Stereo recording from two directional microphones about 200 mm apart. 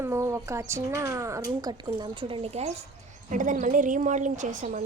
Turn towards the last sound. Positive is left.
turn(degrees=-40)  # may be behind; listen again after turning